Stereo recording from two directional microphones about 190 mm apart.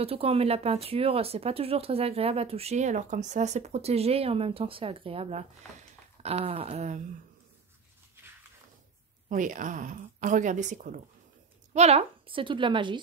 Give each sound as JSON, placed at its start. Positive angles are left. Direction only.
{"t": 0.0, "sound": "speech", "side_deg": -30}
{"t": 9.3, "sound": "a woman's voice", "side_deg": -45}